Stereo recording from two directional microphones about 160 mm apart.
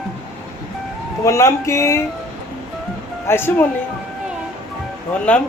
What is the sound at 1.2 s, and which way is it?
Speech, 15° left (ahead or behind).